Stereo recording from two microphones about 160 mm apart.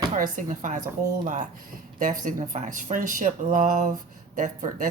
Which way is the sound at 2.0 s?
55° right (ahead or behind).